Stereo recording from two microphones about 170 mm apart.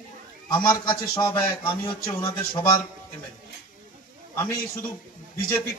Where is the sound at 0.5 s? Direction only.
25° left (ahead or behind).